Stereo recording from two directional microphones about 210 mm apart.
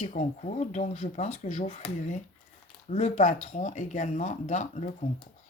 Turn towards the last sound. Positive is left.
turn(degrees=35)  # may be behind; listen again after turning